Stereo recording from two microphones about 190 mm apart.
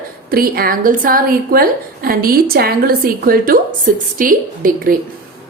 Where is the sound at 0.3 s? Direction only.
50° right (ahead or behind).